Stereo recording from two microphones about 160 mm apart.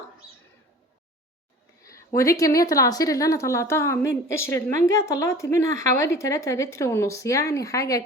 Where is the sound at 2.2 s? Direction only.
20° left (ahead or behind).